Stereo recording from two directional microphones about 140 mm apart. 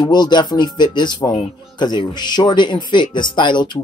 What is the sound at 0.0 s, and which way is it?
Speech, 30° left (ahead or behind).